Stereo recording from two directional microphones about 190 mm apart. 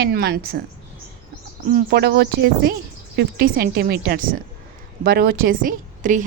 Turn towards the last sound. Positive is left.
turn(degrees=-45)  # may be behind; listen again after turning